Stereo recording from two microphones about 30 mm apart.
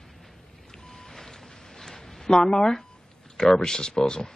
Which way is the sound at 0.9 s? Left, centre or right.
Centre.